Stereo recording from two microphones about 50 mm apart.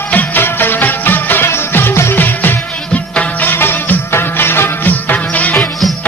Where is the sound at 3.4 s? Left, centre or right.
Left.